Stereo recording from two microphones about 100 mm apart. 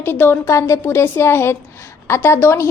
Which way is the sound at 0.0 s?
20° left (ahead or behind).